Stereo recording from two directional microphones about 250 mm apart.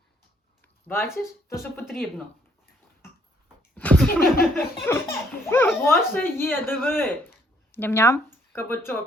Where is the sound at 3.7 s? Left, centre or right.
Centre.